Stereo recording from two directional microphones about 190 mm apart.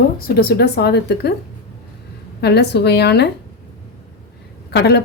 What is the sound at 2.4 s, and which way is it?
Speech, 60° left (ahead or behind).